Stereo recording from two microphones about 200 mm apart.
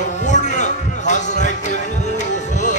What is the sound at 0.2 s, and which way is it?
Music, 35° left (ahead or behind).